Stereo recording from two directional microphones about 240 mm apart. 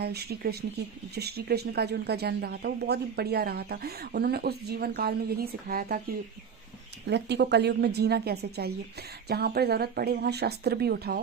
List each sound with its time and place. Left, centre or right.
0.0 s speech: right
7.1 s a woman's voice: right